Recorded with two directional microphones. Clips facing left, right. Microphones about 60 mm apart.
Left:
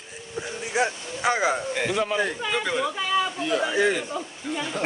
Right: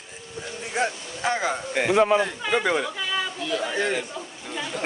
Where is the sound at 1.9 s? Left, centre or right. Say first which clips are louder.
Right 9 dB; right.